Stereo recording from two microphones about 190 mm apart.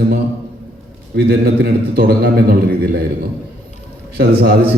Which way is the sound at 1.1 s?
55° right (ahead or behind).